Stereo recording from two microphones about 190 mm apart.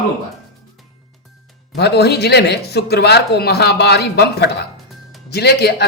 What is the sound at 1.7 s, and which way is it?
Speech, 60° left (ahead or behind).